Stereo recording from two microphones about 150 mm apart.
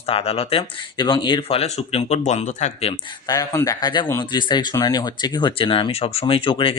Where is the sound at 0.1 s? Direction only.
40° left (ahead or behind).